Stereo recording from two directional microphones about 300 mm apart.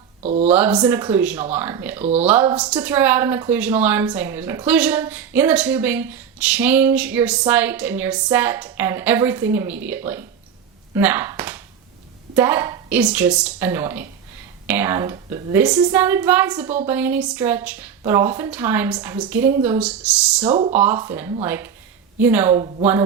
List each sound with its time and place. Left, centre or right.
0.2 s speech: right
0.4 s a woman's voice: centre
10.9 s a sound: centre
12.4 s a woman's voice: centre